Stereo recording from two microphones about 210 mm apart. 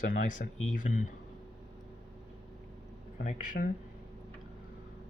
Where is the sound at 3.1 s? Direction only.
40° left (ahead or behind).